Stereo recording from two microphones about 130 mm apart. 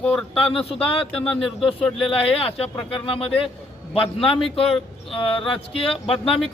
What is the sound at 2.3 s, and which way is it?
Speech, 45° left (ahead or behind).